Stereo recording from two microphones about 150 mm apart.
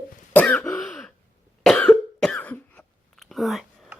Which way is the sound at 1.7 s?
5° left (ahead or behind).